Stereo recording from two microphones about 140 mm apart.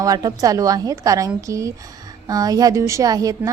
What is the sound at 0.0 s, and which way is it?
A woman's voice, 25° right (ahead or behind).